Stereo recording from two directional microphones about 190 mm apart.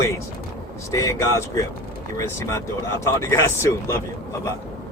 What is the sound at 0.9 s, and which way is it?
Speech, 15° left (ahead or behind).